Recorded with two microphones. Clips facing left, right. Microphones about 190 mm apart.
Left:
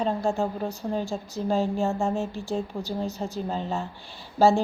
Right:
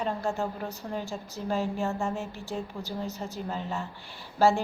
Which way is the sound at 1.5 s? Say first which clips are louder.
Left 4 dB; 30° left (ahead or behind).